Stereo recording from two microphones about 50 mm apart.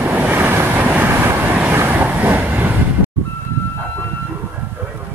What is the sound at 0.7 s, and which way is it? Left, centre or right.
Train, right.